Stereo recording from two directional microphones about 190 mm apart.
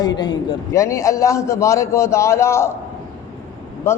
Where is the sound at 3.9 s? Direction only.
15° left (ahead or behind).